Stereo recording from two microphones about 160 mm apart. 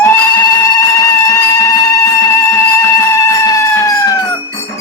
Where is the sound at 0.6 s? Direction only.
20° left (ahead or behind).